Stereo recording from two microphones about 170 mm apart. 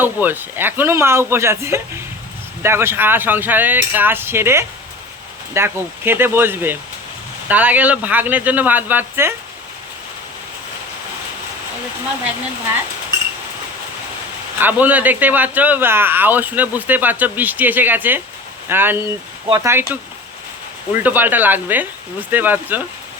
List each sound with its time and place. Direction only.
0.0 s speech: 10° right (ahead or behind)
14.6 s speech: 10° right (ahead or behind)
20.9 s speech: 10° right (ahead or behind)